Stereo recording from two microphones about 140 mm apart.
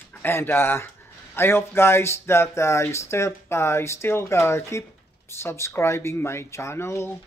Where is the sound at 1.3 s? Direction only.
15° left (ahead or behind).